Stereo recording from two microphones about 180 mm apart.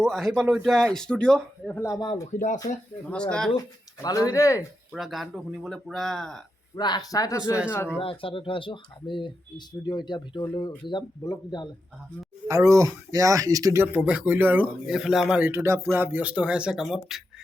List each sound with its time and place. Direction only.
0.0 s a man's voice: centre (ahead or behind)
1.8 s speech: 20° left (ahead or behind)
3.1 s a man's voice: 5° left (ahead or behind)
4.0 s speech: 20° left (ahead or behind)
4.9 s a man's voice: centre (ahead or behind)
6.7 s speech: 25° left (ahead or behind)
7.9 s speech: 30° left (ahead or behind)
12.5 s a man's voice: 15° right (ahead or behind); by 17.2 s centre (ahead or behind)